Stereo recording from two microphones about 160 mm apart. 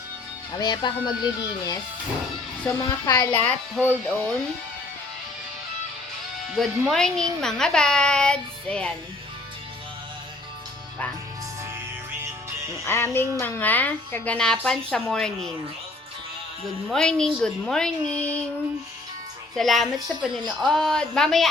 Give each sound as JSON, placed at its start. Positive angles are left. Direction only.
{"t": 0.6, "sound": "a child's voice", "side_deg": 30}
{"t": 3.4, "sound": "speech", "side_deg": 10}
{"t": 6.5, "sound": "speech", "side_deg": 0}
{"t": 12.8, "sound": "music", "side_deg": 15}
{"t": 13.4, "sound": "speech", "side_deg": 10}
{"t": 16.9, "sound": "speech", "side_deg": 5}
{"t": 19.5, "sound": "speech", "side_deg": 0}